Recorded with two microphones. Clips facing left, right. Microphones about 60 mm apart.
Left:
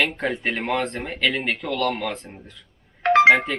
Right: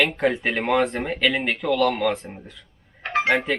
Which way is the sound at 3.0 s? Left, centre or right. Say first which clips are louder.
Left 9 dB; left.